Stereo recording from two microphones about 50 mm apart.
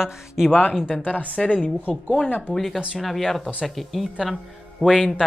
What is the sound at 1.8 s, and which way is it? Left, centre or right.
Speech, left.